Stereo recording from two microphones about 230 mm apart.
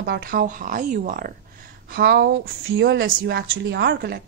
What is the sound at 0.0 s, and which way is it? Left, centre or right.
A woman's voice, right.